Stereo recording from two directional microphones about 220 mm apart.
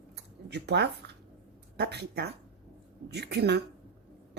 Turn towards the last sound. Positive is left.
turn(degrees=-50)  # may be behind; listen again after turning